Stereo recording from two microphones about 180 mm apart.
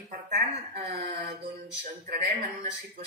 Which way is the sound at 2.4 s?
40° right (ahead or behind).